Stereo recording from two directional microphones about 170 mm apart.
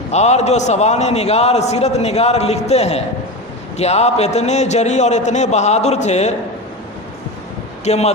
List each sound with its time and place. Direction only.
0.1 s a man's voice: 40° left (ahead or behind)
7.9 s a man's voice: 40° left (ahead or behind)